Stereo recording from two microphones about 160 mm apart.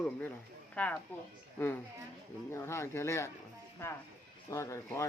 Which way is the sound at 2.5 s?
15° left (ahead or behind).